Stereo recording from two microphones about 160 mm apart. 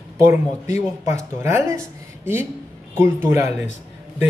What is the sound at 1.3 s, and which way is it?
Speech, 15° right (ahead or behind).